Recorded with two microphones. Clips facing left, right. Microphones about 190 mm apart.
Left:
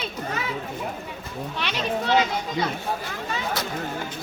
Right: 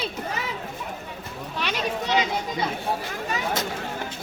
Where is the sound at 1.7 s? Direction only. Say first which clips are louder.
Left 2 dB; 15° right (ahead or behind).